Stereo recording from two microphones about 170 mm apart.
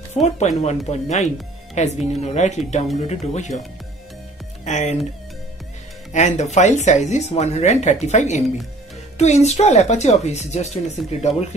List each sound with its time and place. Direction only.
0.1 s speech: 40° left (ahead or behind)
4.6 s speech: 40° left (ahead or behind)
6.1 s speech: 40° left (ahead or behind)